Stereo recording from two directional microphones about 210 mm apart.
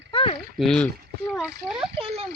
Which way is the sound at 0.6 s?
5° left (ahead or behind).